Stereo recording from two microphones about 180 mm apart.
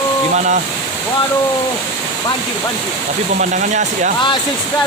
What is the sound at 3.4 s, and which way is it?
Speech, 45° right (ahead or behind).